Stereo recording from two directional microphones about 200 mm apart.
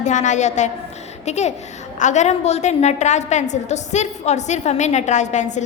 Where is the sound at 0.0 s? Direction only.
35° left (ahead or behind).